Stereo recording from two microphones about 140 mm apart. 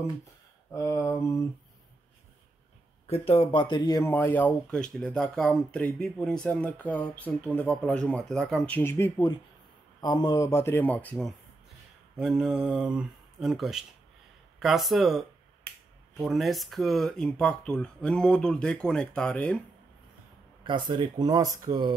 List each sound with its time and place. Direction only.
0.7 s speech: 20° left (ahead or behind)
3.1 s speech: 40° left (ahead or behind); by 9.2 s 20° left (ahead or behind)
9.9 s speech: 30° left (ahead or behind); by 19.6 s 5° left (ahead or behind)
20.6 s speech: 35° right (ahead or behind)